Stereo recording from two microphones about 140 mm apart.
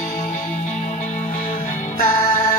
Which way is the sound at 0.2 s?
55° left (ahead or behind).